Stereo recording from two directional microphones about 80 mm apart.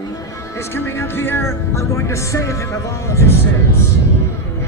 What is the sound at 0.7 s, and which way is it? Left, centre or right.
Speech, left.